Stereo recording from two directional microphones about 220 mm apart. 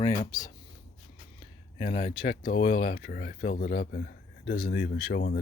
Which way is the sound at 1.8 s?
35° left (ahead or behind).